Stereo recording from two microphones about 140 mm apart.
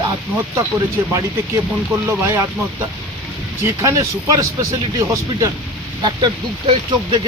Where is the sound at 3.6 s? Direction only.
20° right (ahead or behind).